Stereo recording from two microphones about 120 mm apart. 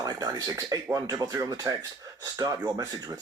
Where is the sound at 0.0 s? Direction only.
30° right (ahead or behind).